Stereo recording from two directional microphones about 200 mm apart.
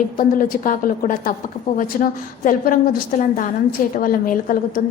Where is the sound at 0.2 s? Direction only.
45° left (ahead or behind).